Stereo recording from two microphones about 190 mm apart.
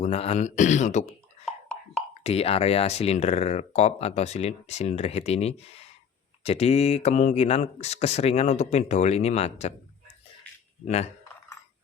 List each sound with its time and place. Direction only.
0.0 s speech: 35° left (ahead or behind)
2.2 s speech: 30° left (ahead or behind)